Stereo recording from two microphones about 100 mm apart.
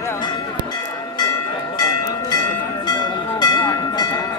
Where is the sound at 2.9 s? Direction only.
45° left (ahead or behind).